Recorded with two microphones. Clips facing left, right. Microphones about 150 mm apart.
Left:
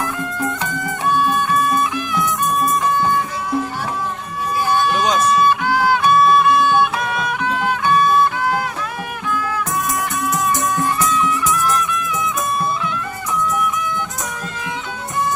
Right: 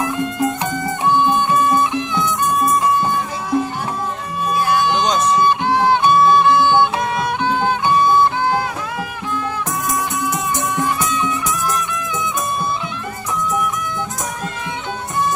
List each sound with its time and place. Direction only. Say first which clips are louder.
0.0 s music: right 4 dB; 20° right (ahead or behind)
4.9 s music: even; 5° left (ahead or behind)
5.3 s music: even; 25° right (ahead or behind)